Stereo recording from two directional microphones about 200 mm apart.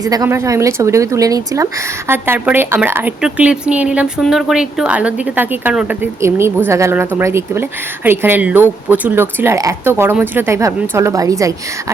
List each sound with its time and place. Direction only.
0.0 s speech: 15° right (ahead or behind)